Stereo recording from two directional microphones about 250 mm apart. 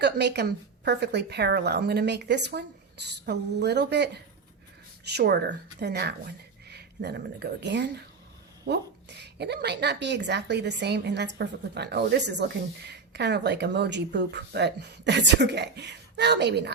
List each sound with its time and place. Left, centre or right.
0.0 s a woman's voice: right